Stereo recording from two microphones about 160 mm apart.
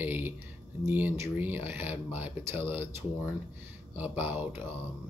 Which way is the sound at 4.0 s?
10° right (ahead or behind).